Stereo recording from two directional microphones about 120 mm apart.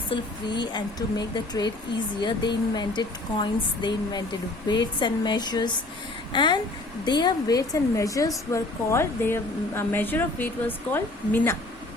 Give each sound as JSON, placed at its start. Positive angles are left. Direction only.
{"t": 0.1, "sound": "a woman's voice", "side_deg": 40}